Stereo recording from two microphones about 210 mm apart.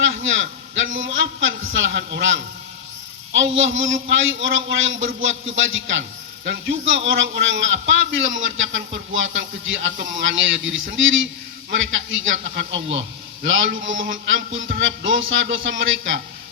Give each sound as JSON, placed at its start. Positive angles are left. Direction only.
{"t": 0.0, "sound": "a man's voice", "side_deg": -65}